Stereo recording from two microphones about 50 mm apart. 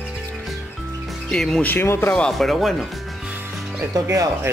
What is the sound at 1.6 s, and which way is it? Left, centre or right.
Speech, left.